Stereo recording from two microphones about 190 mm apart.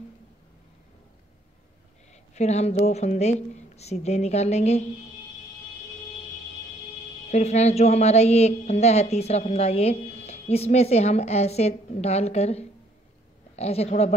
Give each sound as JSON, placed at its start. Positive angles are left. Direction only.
{"t": 2.3, "sound": "a woman's voice", "side_deg": 35}
{"t": 7.2, "sound": "a woman's voice", "side_deg": 35}